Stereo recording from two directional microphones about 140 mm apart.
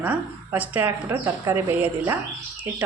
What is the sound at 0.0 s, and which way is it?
Speech, 10° right (ahead or behind).